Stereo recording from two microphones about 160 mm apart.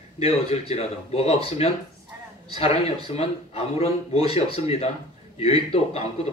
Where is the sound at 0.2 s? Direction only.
40° left (ahead or behind).